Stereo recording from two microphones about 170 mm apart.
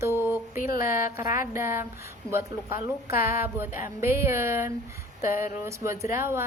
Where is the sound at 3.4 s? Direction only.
15° right (ahead or behind).